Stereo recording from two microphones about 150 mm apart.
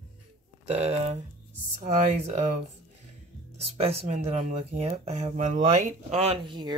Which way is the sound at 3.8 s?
45° right (ahead or behind).